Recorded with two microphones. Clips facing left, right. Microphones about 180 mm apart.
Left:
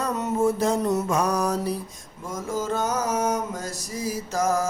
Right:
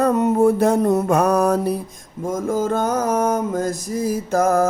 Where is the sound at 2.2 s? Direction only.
50° right (ahead or behind).